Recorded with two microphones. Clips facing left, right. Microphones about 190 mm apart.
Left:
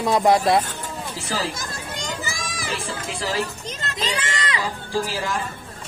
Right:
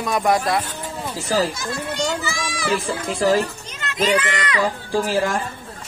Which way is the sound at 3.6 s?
35° left (ahead or behind).